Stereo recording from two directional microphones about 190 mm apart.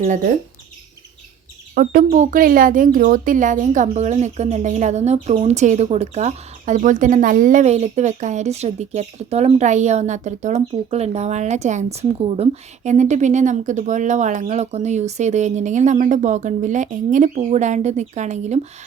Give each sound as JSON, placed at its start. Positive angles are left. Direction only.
{"t": 0.0, "sound": "speech", "side_deg": -40}
{"t": 1.7, "sound": "speech", "side_deg": -45}